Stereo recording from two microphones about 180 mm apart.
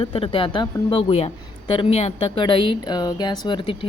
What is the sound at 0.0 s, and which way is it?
Speech, 30° left (ahead or behind).